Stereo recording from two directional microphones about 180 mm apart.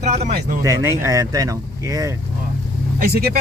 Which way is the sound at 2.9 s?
55° right (ahead or behind).